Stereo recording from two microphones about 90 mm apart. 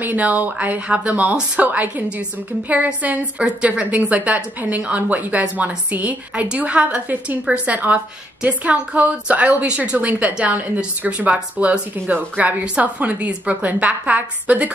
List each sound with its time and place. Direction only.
0.0 s a woman's voice: 20° right (ahead or behind)